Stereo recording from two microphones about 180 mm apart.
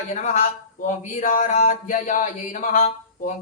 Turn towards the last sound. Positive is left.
turn(degrees=45)  # may be behind; listen again after turning